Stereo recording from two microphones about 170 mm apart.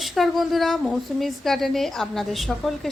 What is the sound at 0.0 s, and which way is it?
A woman's voice, centre (ahead or behind).